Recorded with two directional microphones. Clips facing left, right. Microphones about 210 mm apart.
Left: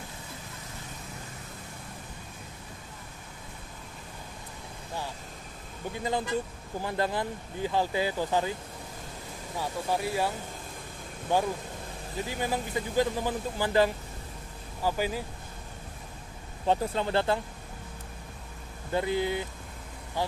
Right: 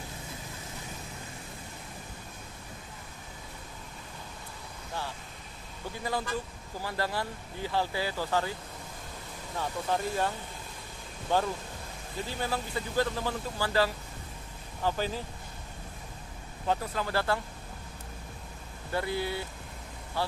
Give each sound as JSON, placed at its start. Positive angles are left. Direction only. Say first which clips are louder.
{"t": 6.0, "sound": "speech", "louder": "left 3 dB", "side_deg": 20}
{"t": 9.6, "sound": "speech", "louder": "left 1 dB", "side_deg": 10}
{"t": 16.6, "sound": "speech", "louder": "left 4 dB", "side_deg": 25}
{"t": 18.9, "sound": "speech", "louder": "left 4 dB", "side_deg": 20}